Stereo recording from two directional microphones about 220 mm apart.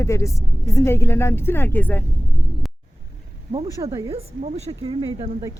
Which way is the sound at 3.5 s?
25° right (ahead or behind).